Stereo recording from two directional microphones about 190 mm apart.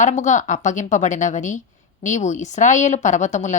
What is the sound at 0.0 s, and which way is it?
A woman's voice, 40° left (ahead or behind).